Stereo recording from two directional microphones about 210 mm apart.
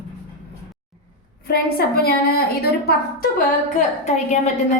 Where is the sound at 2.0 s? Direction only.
45° left (ahead or behind).